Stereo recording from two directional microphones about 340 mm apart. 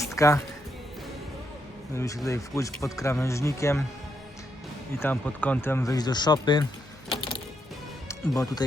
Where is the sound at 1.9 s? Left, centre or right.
Centre.